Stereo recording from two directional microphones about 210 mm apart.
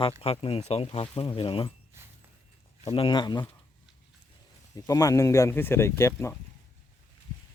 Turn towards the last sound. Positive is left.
turn(degrees=15)  # may be behind; listen again after turning